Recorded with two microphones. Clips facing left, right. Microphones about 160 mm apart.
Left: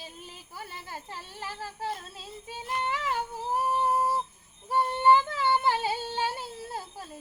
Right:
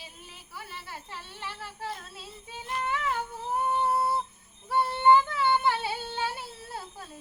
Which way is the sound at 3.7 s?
15° left (ahead or behind).